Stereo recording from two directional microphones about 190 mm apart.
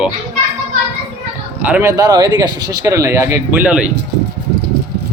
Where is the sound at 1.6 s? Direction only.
10° right (ahead or behind).